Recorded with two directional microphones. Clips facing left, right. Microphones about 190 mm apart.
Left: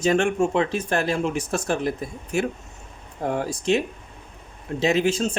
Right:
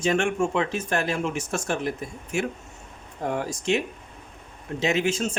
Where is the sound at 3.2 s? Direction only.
35° left (ahead or behind).